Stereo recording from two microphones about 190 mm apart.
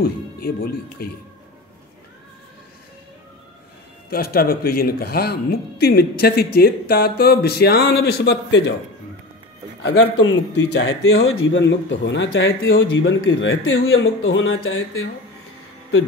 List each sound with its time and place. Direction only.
0.0 s speech: 55° left (ahead or behind)
4.1 s speech: 50° left (ahead or behind); by 8.7 s 70° left (ahead or behind)
9.8 s speech: 70° left (ahead or behind); by 15.0 s 90° left